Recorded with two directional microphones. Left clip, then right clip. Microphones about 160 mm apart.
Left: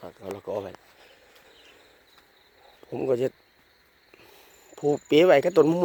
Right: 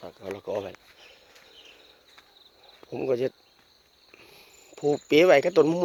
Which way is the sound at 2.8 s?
15° left (ahead or behind).